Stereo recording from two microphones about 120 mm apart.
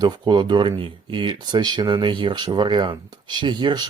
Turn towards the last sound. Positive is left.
turn(degrees=-35)  # may be behind; listen again after turning